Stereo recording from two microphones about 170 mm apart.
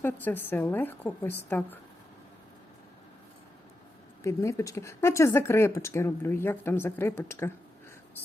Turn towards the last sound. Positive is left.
turn(degrees=15)  # may be behind; listen again after turning